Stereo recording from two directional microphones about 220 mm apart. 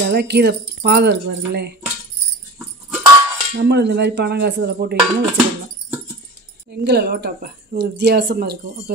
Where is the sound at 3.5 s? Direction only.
50° right (ahead or behind).